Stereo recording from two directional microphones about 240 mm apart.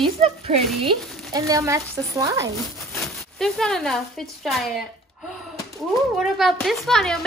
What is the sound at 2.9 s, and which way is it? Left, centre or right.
Speech, centre.